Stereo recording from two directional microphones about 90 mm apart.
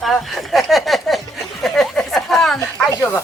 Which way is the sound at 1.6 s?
Centre (ahead or behind).